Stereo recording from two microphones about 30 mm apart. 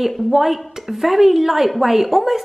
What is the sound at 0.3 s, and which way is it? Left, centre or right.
A woman's voice, centre.